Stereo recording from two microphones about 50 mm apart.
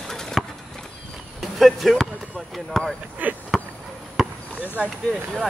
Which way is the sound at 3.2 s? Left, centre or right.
Right.